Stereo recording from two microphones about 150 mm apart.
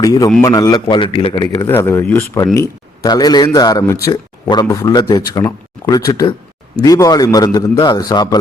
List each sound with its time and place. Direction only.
0.0 s a man's voice: 25° left (ahead or behind)
1.6 s speech: 15° left (ahead or behind)